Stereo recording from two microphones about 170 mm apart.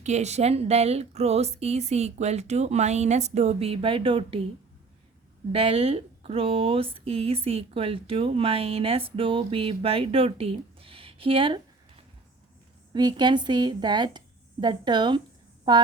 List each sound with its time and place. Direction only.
0.0 s speech: 40° right (ahead or behind)
5.5 s speech: 35° right (ahead or behind)
12.9 s a woman's voice: 25° right (ahead or behind)